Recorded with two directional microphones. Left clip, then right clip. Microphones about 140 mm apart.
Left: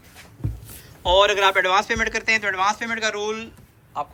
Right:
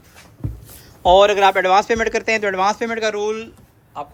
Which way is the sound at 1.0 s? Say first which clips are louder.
Right 5 dB; 45° right (ahead or behind).